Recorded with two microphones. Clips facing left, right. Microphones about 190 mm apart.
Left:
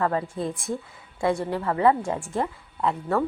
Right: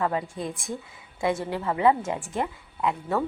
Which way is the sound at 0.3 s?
30° left (ahead or behind).